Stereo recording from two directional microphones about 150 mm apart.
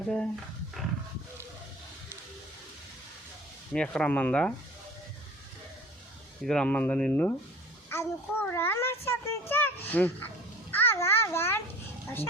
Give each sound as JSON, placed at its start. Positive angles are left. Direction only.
{"t": 3.7, "sound": "a child's voice", "side_deg": 5}
{"t": 6.4, "sound": "a child's voice", "side_deg": 5}
{"t": 9.5, "sound": "a sound", "side_deg": 15}
{"t": 12.0, "sound": "speech", "side_deg": 15}